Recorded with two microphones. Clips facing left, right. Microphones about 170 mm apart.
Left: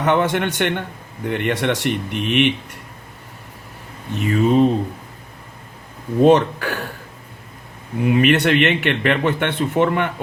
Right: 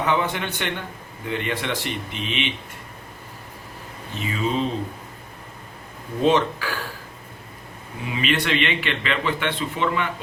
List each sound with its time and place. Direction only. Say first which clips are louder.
0.0 s a man's voice: left 5 dB; 70° left (ahead or behind)
4.1 s speech: left 9 dB; 60° left (ahead or behind)
6.2 s a man's voice: left 6 dB; 60° left (ahead or behind)
8.0 s a man's voice: left 9 dB; 55° left (ahead or behind)